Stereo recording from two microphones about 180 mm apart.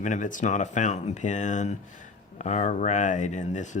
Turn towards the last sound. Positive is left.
turn(degrees=40)  # may be behind; listen again after turning